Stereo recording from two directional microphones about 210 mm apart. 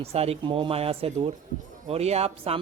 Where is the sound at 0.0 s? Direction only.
30° right (ahead or behind).